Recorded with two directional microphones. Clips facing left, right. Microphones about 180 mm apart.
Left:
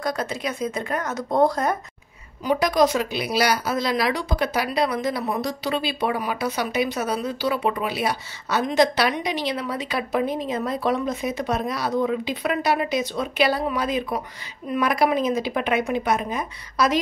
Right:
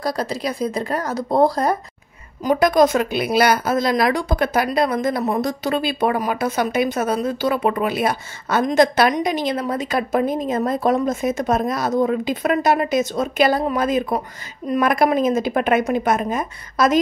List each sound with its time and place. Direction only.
0.0 s speech: 35° right (ahead or behind)
2.4 s speech: 50° right (ahead or behind)